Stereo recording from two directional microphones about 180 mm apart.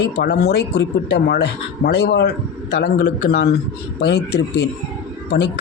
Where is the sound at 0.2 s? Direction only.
65° left (ahead or behind).